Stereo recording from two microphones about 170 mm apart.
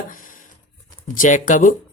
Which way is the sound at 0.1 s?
50° left (ahead or behind).